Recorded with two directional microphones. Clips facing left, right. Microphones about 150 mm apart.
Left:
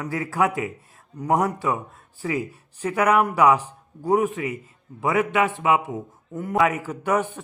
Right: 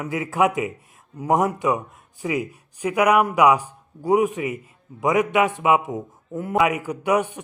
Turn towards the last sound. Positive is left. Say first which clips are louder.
# right 2 dB
turn(degrees=-10)  # may be behind; listen again after turning